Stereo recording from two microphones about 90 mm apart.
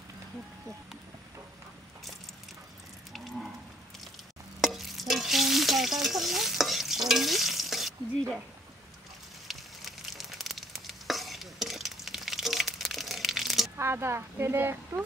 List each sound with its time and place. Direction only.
4.6 s stir: centre (ahead or behind)
9.5 s a sound: centre (ahead or behind)
13.7 s speech: 30° right (ahead or behind)